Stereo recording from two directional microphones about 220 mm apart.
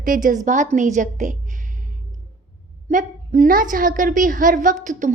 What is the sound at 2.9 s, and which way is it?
A woman's voice, 40° right (ahead or behind).